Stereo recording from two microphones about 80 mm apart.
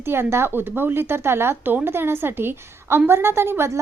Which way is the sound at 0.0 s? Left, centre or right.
Right.